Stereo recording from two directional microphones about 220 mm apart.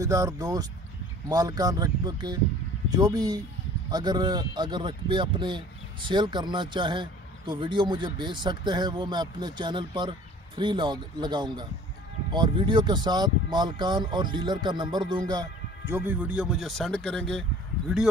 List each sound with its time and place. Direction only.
0.0 s speech: 15° right (ahead or behind)